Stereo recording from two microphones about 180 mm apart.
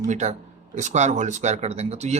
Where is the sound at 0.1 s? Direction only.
40° right (ahead or behind).